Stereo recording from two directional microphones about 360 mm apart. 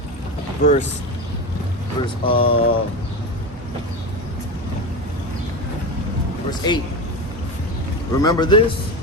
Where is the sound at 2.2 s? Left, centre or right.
Left.